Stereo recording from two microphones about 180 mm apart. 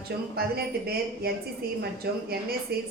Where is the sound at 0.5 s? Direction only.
60° right (ahead or behind).